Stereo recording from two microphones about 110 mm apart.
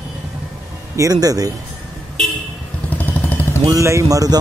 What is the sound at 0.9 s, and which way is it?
Speech, 30° right (ahead or behind).